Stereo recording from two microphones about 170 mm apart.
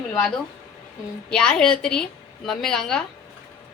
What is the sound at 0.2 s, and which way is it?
A woman's voice, 5° left (ahead or behind).